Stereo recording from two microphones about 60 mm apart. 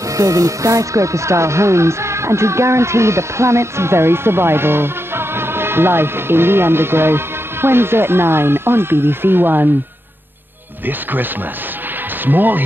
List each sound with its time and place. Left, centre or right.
0.2 s speech: right
12.3 s speech: right